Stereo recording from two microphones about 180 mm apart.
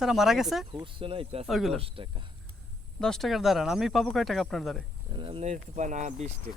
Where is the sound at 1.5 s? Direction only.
Centre (ahead or behind).